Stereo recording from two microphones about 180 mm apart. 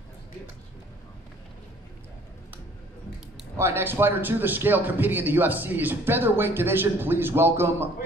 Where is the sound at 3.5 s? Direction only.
15° right (ahead or behind).